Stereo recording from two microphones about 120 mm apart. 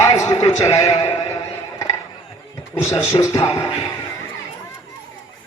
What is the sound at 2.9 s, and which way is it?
Speech, 25° left (ahead or behind).